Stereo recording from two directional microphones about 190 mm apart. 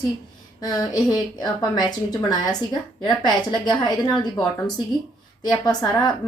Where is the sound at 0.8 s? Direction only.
20° left (ahead or behind).